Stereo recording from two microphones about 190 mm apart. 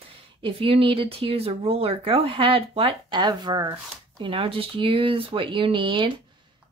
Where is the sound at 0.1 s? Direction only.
30° right (ahead or behind).